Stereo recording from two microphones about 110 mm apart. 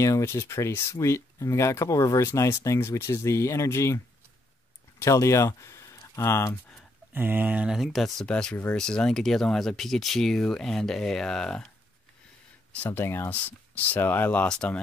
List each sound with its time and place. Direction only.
0.0 s speech: 25° left (ahead or behind)
7.1 s speech: 20° right (ahead or behind); by 11.7 s 5° left (ahead or behind)
12.7 s speech: 15° left (ahead or behind)